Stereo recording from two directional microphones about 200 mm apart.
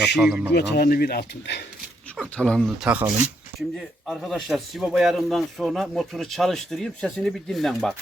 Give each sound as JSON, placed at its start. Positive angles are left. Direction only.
{"t": 0.2, "sound": "speech", "side_deg": -5}
{"t": 0.5, "sound": "speech", "side_deg": 55}
{"t": 2.1, "sound": "speech", "side_deg": 5}